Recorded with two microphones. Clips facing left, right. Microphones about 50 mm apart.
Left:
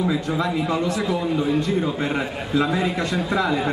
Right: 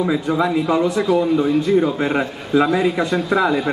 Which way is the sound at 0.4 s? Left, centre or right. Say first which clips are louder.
Right 5 dB; centre.